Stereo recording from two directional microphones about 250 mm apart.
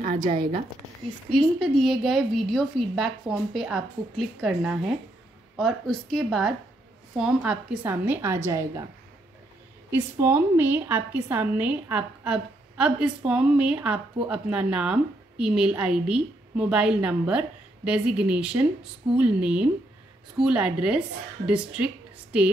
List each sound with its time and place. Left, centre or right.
0.3 s a woman's voice: right
1.6 s a woman's voice: centre
9.8 s a woman's voice: centre